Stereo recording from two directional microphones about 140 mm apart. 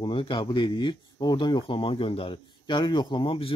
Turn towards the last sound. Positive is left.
turn(degrees=40)  # may be behind; listen again after turning